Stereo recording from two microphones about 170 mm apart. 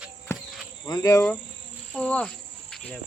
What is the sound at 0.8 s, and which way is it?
Speech, 25° left (ahead or behind).